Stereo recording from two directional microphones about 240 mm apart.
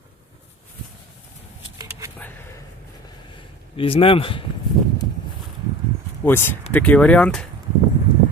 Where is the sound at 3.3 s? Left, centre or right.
Left.